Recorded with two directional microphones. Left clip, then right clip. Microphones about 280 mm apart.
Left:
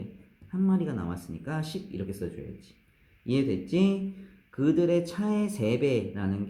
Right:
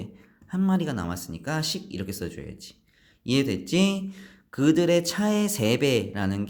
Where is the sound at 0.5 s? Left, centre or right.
Right.